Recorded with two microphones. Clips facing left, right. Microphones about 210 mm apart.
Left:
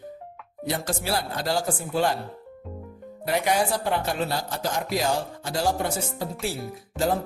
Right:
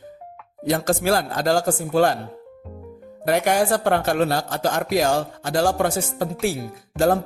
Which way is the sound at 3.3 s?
50° right (ahead or behind).